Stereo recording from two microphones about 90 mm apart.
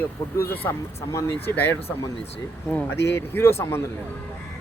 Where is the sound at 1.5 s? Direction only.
20° left (ahead or behind).